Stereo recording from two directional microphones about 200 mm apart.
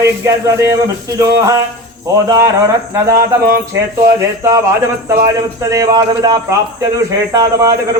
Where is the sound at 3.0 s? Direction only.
15° right (ahead or behind).